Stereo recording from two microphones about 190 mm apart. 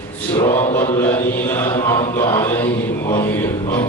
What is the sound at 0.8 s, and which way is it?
Speech, 15° left (ahead or behind).